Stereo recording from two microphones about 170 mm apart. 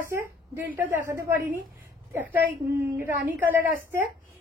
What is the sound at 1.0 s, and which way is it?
Speech, 15° right (ahead or behind).